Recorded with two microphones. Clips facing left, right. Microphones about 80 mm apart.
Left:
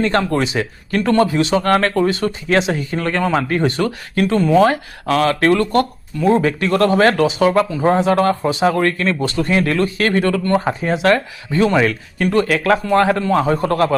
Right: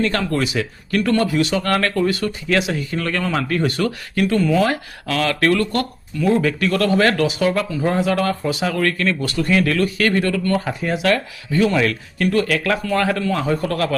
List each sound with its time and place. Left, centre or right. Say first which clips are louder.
0.0 s speech: left 3 dB; left